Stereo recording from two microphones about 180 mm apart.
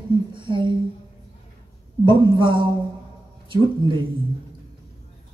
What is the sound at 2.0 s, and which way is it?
Speech, 25° right (ahead or behind).